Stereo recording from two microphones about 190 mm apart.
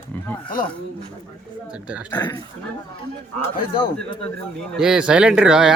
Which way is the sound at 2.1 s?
20° left (ahead or behind).